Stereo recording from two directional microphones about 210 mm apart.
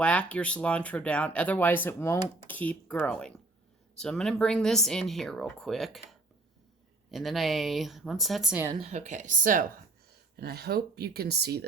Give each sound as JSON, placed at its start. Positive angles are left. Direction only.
{"t": 0.0, "sound": "speech", "side_deg": 5}
{"t": 8.7, "sound": "speech", "side_deg": -30}